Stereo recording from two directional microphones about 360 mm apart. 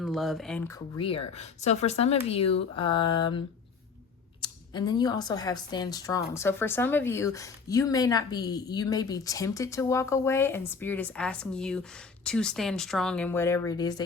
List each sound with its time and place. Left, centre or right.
0.0 s speech: centre
0.9 s speech: centre